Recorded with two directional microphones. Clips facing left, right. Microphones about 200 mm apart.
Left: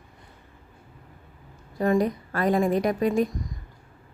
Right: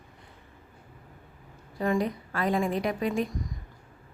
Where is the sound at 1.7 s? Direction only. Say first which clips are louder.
Left 5 dB; 40° left (ahead or behind).